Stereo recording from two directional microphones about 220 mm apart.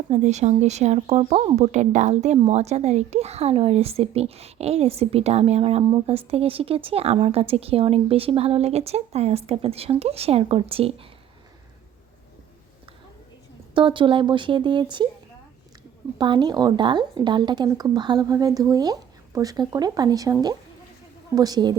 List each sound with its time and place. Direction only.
0.1 s speech: 30° right (ahead or behind)
13.7 s speech: 20° right (ahead or behind)
16.1 s a woman's voice: 20° right (ahead or behind)